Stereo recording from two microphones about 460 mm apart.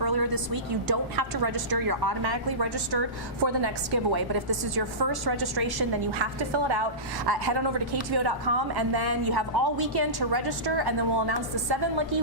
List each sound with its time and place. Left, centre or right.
0.0 s a woman's voice: right
7.3 s a woman's voice: right